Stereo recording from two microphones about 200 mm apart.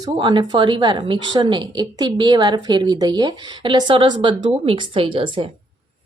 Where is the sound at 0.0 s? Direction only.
20° right (ahead or behind).